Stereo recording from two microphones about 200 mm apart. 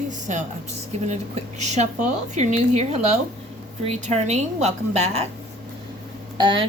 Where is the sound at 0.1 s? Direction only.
40° right (ahead or behind).